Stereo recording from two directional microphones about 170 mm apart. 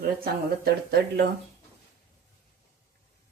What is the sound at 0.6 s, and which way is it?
Speech, 70° right (ahead or behind).